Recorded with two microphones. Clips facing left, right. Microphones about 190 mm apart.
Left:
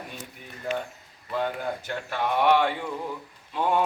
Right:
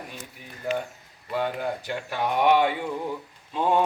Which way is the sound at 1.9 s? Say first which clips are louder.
Left 2 dB; 15° right (ahead or behind).